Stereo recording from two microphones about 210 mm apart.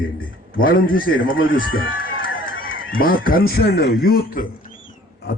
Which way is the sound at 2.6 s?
75° left (ahead or behind).